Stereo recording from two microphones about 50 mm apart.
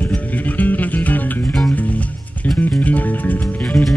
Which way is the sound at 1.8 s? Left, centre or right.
Left.